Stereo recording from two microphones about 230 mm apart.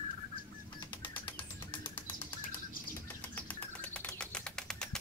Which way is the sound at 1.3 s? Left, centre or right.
Centre.